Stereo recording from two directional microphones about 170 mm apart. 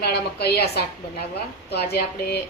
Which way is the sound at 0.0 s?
70° left (ahead or behind).